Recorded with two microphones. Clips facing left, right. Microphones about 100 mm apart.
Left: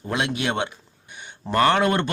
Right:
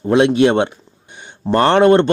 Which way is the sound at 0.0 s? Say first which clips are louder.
Right 13 dB; 30° right (ahead or behind).